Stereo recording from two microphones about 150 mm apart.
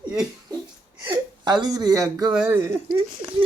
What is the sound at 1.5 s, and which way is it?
Speech, 25° right (ahead or behind).